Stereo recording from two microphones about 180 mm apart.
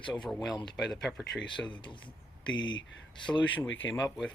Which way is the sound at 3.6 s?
90° left.